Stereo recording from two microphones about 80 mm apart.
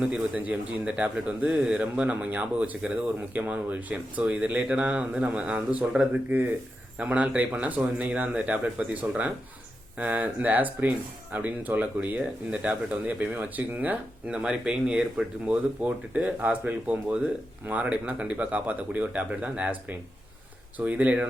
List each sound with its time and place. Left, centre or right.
0.0 s speech: centre
6.3 s speech: right
20.7 s speech: centre